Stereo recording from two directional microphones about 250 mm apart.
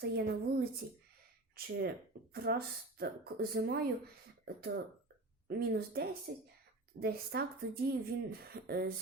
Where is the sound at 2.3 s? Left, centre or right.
Right.